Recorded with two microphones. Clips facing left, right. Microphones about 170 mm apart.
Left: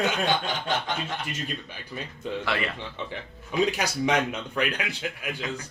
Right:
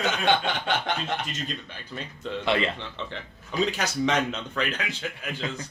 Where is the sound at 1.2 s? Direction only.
10° left (ahead or behind).